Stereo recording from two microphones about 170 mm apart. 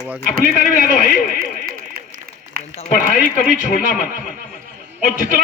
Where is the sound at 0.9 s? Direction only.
60° left (ahead or behind).